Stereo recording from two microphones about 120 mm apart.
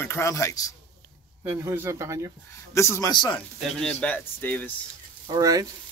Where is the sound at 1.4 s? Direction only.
20° right (ahead or behind).